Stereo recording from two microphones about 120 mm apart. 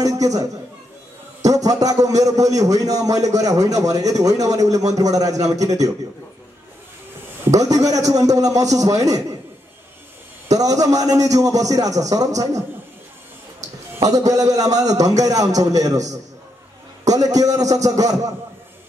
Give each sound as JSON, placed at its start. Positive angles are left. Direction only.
{"t": 0.0, "sound": "a sound", "side_deg": -30}
{"t": 1.4, "sound": "a man's voice", "side_deg": -30}
{"t": 7.6, "sound": "a man's voice", "side_deg": -30}
{"t": 10.5, "sound": "a man's voice", "side_deg": -30}
{"t": 14.0, "sound": "a man's voice", "side_deg": -30}
{"t": 17.4, "sound": "a man's voice", "side_deg": -30}